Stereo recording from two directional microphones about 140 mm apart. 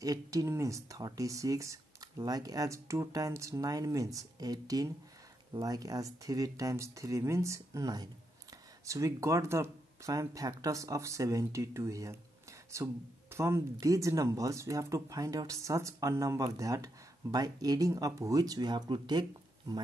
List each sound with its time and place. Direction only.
0.0 s speech: 25° right (ahead or behind)